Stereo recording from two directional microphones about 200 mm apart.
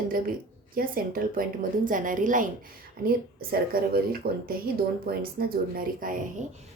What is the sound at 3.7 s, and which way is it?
A woman's voice, 45° right (ahead or behind).